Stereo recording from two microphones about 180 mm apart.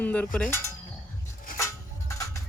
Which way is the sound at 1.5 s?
15° left (ahead or behind).